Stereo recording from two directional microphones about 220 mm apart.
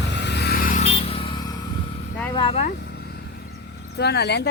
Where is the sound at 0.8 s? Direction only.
25° left (ahead or behind).